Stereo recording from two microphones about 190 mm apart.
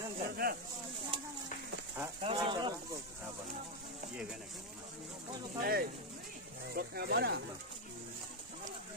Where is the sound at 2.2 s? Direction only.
25° right (ahead or behind).